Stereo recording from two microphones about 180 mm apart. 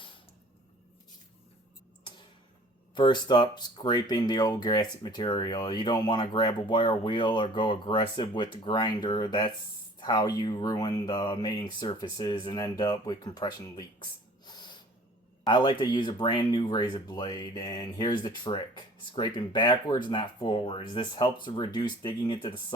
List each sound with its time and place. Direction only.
2.9 s speech: 25° left (ahead or behind)